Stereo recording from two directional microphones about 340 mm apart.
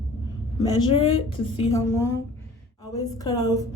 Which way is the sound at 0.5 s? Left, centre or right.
Centre.